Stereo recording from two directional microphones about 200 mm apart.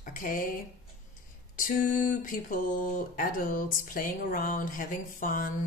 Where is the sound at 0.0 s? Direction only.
45° left (ahead or behind).